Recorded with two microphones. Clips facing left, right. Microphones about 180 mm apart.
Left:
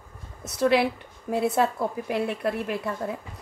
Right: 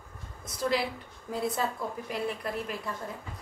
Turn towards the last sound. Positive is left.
turn(degrees=65)  # may be behind; listen again after turning